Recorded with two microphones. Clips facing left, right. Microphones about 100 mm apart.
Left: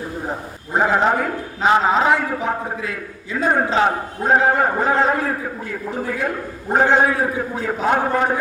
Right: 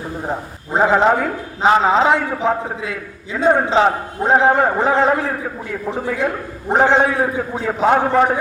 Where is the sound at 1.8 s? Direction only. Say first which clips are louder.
Right 2 dB; 25° right (ahead or behind).